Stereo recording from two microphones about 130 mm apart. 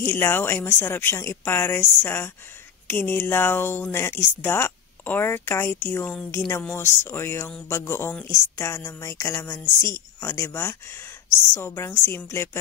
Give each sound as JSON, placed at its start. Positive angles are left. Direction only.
{"t": 0.0, "sound": "speech", "side_deg": 15}